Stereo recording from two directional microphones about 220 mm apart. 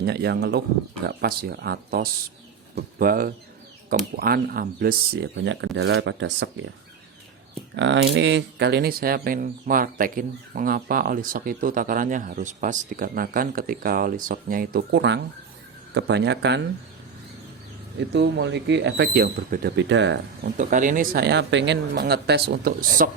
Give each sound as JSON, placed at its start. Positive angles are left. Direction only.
{"t": 0.0, "sound": "speech", "side_deg": -45}
{"t": 7.8, "sound": "speech", "side_deg": -55}
{"t": 18.1, "sound": "speech", "side_deg": -50}
{"t": 20.6, "sound": "speech", "side_deg": -35}